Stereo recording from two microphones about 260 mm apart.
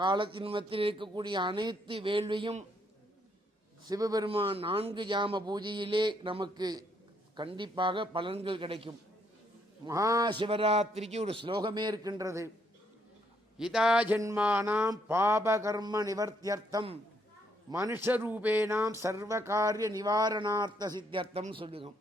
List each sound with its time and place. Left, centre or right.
0.0 s speech: centre
3.8 s speech: centre
13.6 s speech: centre; by 21.8 s right